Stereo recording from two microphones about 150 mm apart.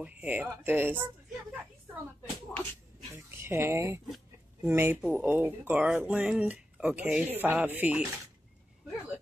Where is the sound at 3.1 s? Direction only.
15° right (ahead or behind).